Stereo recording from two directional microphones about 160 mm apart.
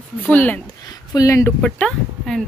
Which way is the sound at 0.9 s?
25° left (ahead or behind).